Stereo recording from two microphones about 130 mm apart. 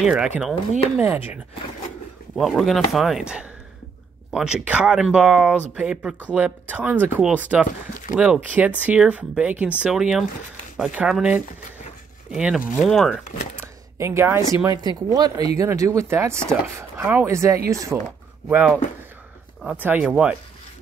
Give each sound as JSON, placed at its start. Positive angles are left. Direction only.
{"t": 0.0, "sound": "speech", "side_deg": -10}
{"t": 2.3, "sound": "speech", "side_deg": 0}
{"t": 12.8, "sound": "speech", "side_deg": 5}
{"t": 13.9, "sound": "speech", "side_deg": -20}
{"t": 19.6, "sound": "speech", "side_deg": -10}